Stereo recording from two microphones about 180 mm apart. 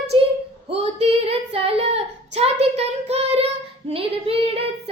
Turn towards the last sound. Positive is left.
turn(degrees=-30)  # may be behind; listen again after turning